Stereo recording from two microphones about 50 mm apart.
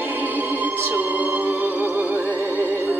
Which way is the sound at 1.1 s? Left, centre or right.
Right.